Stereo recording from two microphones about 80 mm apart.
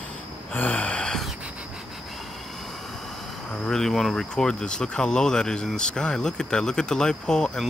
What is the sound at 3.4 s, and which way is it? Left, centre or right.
Speech, centre.